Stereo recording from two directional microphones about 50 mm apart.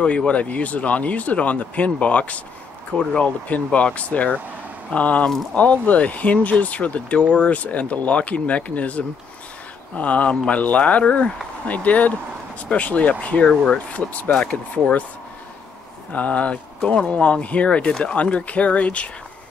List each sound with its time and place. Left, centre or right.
0.3 s speech: left
3.0 s speech: centre
3.4 s speech: left; by 14.6 s centre
16.1 s speech: left